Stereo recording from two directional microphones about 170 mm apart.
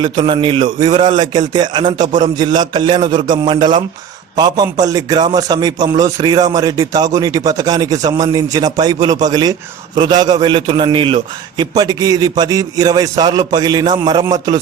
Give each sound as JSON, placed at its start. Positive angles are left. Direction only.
{"t": 0.0, "sound": "a man's voice", "side_deg": -30}